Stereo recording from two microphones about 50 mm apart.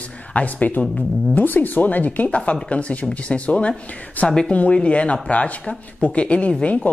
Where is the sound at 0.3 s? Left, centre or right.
Left.